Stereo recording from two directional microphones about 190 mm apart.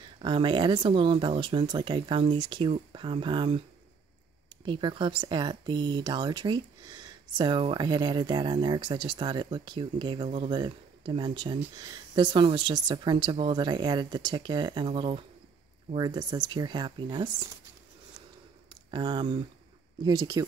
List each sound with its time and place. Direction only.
0.2 s speech: 25° right (ahead or behind)
4.6 s speech: 25° right (ahead or behind)
18.9 s speech: 25° right (ahead or behind)